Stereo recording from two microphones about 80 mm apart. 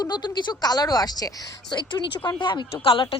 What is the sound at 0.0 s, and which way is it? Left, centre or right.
Speech, left.